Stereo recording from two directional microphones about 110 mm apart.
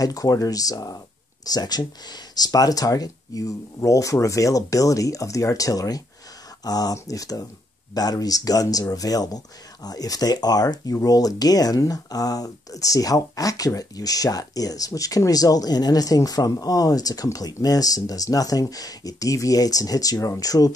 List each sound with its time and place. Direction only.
0.0 s speech: 35° left (ahead or behind)